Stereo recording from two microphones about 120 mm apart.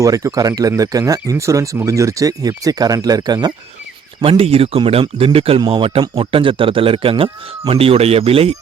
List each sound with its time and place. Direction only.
0.0 s speech: 30° right (ahead or behind)
4.2 s speech: 55° right (ahead or behind)